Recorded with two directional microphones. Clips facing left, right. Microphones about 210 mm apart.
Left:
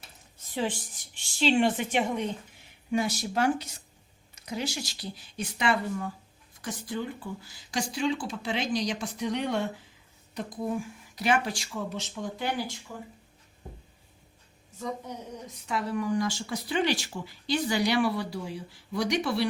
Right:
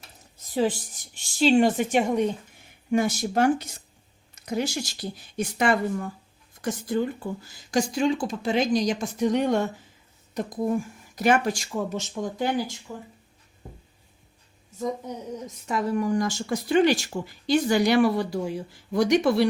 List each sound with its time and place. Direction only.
0.5 s a woman's voice: 40° right (ahead or behind)
15.4 s speech: 45° right (ahead or behind)